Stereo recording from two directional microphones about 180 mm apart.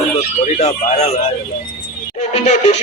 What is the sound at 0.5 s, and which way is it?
Speech, 40° left (ahead or behind).